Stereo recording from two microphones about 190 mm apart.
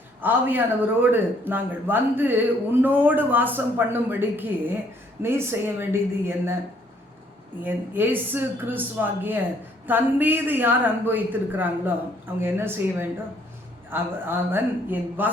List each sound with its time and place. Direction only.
0.2 s speech: 10° right (ahead or behind)
7.6 s speech: 10° right (ahead or behind)